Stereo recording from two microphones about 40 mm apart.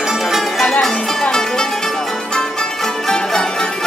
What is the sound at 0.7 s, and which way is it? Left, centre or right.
Music, centre.